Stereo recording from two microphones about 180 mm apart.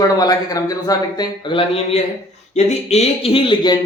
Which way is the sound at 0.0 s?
20° left (ahead or behind).